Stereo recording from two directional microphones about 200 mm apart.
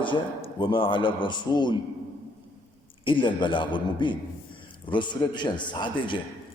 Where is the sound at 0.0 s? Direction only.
25° left (ahead or behind).